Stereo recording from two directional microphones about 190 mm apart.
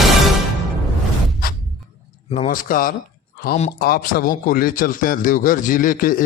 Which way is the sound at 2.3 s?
35° left (ahead or behind).